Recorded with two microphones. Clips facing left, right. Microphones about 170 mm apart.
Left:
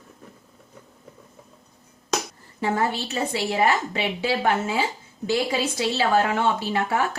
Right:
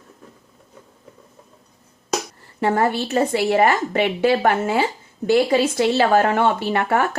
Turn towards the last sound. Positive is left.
turn(degrees=-60)  # may be behind; listen again after turning